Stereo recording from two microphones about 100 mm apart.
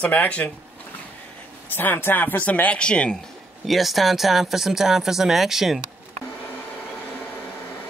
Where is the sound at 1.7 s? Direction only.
20° left (ahead or behind).